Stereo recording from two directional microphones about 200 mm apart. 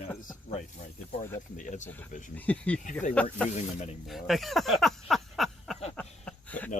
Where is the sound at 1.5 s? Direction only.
40° left (ahead or behind).